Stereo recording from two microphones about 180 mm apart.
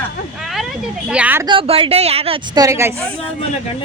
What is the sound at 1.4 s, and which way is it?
Speech, 30° right (ahead or behind).